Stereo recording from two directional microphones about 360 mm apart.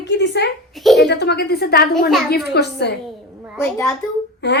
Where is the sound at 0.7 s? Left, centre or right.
Centre.